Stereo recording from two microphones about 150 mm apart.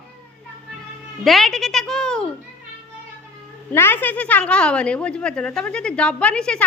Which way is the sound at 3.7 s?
15° left (ahead or behind).